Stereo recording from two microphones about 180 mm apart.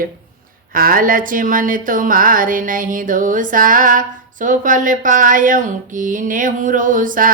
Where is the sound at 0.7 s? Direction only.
50° right (ahead or behind).